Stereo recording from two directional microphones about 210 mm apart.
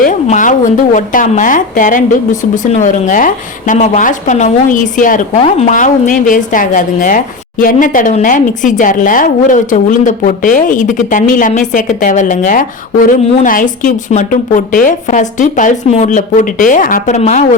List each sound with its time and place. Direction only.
0.0 s speech: 35° left (ahead or behind)